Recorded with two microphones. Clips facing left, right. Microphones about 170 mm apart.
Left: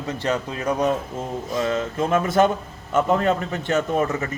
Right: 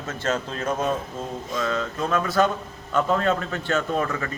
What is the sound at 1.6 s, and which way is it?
Speech, 25° left (ahead or behind).